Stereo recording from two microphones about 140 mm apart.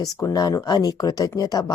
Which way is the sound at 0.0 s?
25° left (ahead or behind).